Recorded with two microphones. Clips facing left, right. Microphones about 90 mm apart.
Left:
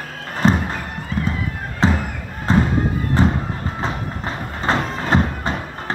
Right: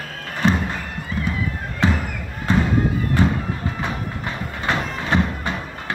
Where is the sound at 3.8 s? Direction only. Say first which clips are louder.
Left 2 dB; 30° left (ahead or behind).